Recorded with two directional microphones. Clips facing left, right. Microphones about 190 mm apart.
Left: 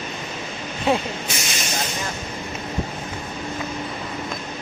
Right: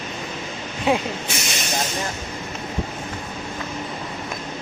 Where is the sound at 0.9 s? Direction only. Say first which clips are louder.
Even; 15° right (ahead or behind).